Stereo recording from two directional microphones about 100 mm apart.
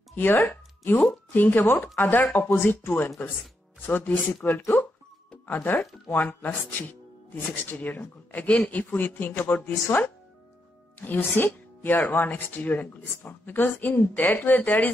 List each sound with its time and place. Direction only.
0.1 s speech: 20° left (ahead or behind)